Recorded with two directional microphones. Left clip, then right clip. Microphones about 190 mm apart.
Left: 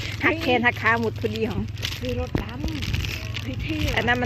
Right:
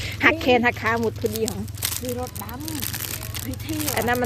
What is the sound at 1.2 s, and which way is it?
A child's voice, 15° right (ahead or behind).